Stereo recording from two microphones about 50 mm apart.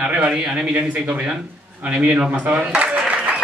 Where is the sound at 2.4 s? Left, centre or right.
Right.